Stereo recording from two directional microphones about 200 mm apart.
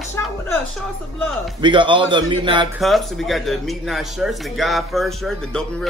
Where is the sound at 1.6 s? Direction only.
25° right (ahead or behind).